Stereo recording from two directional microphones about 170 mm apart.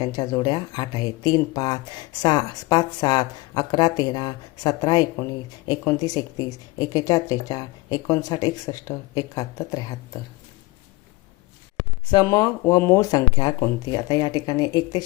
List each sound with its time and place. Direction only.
0.0 s speech: 25° left (ahead or behind)
12.1 s speech: 20° left (ahead or behind)